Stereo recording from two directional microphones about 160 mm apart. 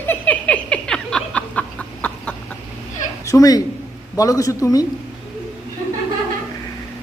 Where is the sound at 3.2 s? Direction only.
20° left (ahead or behind).